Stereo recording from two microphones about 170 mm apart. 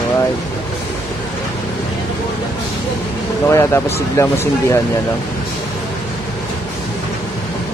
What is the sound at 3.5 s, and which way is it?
Speech, 15° left (ahead or behind).